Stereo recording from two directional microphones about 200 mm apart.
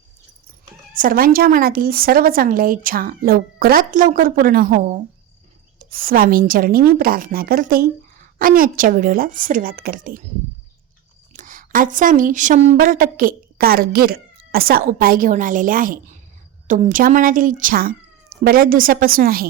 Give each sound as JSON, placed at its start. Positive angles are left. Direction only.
{"t": 0.9, "sound": "a woman's voice", "side_deg": -45}
{"t": 11.3, "sound": "a woman's voice", "side_deg": -45}